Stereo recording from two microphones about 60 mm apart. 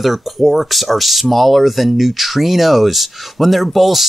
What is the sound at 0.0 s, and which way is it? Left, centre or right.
Speech, centre.